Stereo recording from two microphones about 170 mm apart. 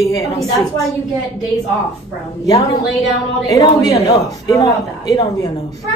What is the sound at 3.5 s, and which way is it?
Speech, 20° left (ahead or behind).